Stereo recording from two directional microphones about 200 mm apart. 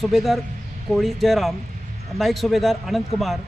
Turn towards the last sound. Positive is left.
turn(degrees=0)  # may be behind; listen again after turning